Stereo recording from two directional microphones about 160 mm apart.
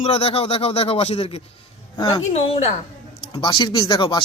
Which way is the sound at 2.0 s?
25° left (ahead or behind).